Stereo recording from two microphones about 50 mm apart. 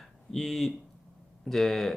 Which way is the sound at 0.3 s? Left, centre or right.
Centre.